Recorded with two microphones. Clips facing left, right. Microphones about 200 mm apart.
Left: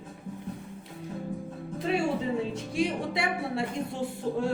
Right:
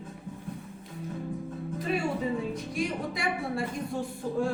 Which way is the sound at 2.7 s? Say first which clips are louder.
Left 5 dB; 25° left (ahead or behind).